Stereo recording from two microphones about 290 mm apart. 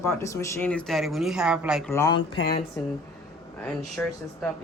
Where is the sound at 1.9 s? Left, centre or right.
Centre.